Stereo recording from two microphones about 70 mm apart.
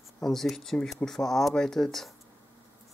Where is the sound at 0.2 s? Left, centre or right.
Centre.